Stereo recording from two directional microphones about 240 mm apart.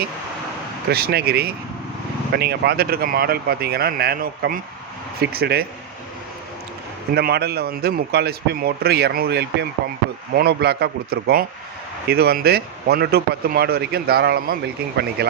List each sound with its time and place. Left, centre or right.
0.9 s speech: right
7.1 s speech: right